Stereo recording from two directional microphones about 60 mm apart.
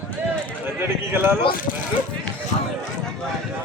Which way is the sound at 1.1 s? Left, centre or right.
Right.